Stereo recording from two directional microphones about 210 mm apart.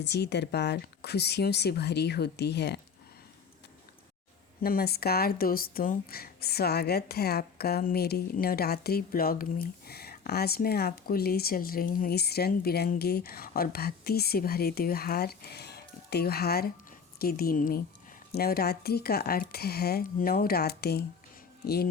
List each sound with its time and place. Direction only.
0.0 s speech: 55° left (ahead or behind)
4.6 s speech: 45° left (ahead or behind)